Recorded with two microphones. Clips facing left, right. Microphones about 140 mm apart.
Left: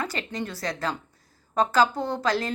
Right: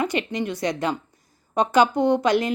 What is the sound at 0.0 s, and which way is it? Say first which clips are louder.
A woman's voice: right 6 dB; 20° right (ahead or behind).